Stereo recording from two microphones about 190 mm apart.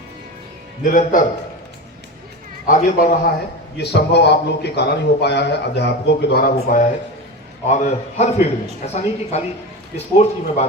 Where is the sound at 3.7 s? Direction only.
60° left (ahead or behind).